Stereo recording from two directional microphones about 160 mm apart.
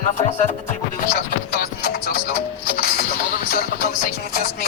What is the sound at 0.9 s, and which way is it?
Music, 65° left (ahead or behind).